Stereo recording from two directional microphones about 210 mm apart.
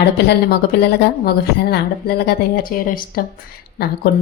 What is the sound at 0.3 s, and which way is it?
Speech, 55° left (ahead or behind).